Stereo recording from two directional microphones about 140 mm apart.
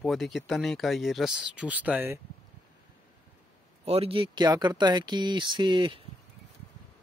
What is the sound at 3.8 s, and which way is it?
Speech, 45° right (ahead or behind).